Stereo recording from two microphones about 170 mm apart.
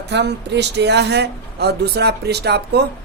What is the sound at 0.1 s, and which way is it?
Speech, 85° right.